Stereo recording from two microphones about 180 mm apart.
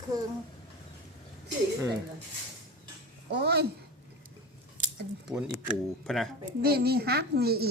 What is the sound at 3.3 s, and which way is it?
Speech, 65° right (ahead or behind).